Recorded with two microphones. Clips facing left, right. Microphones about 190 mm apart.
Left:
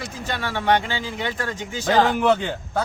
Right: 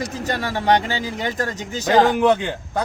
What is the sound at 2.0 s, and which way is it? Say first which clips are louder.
Speech: right 2 dB; 15° right (ahead or behind).